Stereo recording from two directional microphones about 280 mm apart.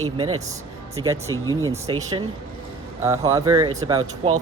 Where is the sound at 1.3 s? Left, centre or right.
Centre.